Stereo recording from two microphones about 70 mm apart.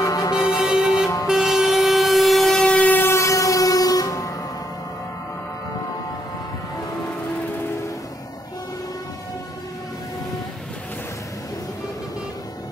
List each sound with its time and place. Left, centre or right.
0.0 s music: left
0.4 s music: centre
1.2 s vehicle: centre
2.6 s train: centre
3.0 s train: left